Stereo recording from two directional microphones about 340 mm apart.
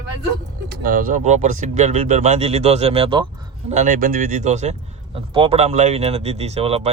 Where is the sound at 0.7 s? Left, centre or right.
Right.